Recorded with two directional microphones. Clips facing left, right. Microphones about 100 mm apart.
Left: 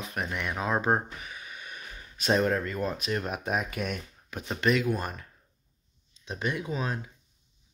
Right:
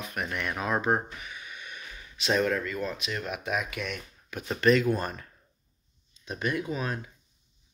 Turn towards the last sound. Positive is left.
turn(degrees=25)  # may be behind; listen again after turning